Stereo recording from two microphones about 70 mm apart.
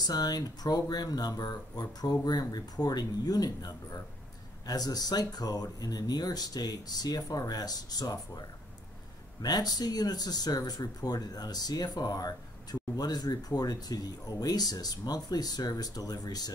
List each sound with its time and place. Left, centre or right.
0.0 s speech: left